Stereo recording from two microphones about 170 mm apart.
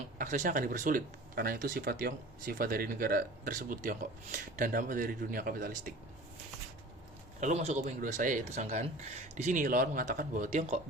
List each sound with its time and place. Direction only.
0.2 s speech: 50° right (ahead or behind)
7.3 s speech: 45° right (ahead or behind)